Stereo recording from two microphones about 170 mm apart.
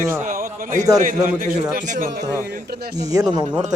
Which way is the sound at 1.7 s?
50° right (ahead or behind).